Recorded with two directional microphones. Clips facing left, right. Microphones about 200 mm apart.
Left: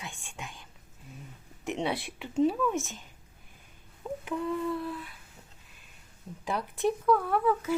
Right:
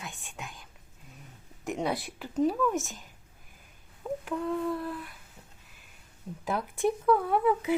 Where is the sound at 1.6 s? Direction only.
Centre (ahead or behind).